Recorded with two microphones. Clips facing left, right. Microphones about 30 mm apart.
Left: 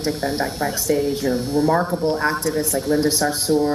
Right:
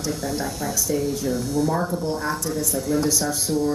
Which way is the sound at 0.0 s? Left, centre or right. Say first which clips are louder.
Left 4 dB; left.